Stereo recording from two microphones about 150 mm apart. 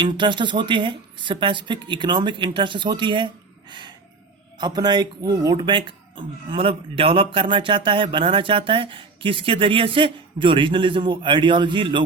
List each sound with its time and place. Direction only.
0.0 s speech: 30° right (ahead or behind)